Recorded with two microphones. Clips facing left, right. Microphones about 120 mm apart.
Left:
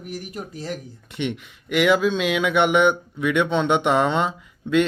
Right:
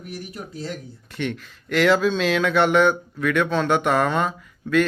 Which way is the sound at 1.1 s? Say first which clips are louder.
Left 1 dB; 20° left (ahead or behind).